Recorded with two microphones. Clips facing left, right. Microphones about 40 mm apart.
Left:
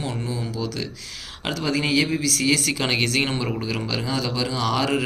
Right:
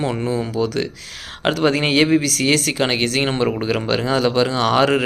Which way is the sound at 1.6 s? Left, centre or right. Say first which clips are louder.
Right 4 dB; right.